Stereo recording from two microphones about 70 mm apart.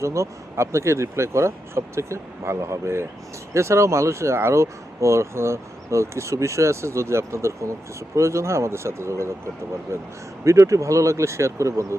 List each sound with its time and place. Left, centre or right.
0.0 s speech: right